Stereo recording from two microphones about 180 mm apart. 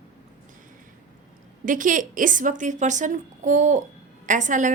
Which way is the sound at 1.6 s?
45° right (ahead or behind).